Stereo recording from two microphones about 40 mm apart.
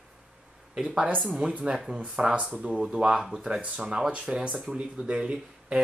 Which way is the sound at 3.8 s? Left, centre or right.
Centre.